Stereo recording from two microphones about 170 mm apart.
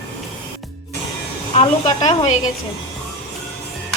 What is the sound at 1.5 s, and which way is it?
Speech, 35° left (ahead or behind).